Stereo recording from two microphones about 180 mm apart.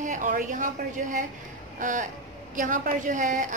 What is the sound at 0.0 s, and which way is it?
A woman's voice, 45° right (ahead or behind).